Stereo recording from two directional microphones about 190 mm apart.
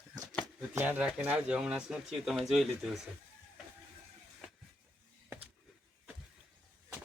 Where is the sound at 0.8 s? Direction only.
10° right (ahead or behind).